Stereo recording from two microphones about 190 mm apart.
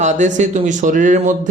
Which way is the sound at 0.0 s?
40° right (ahead or behind).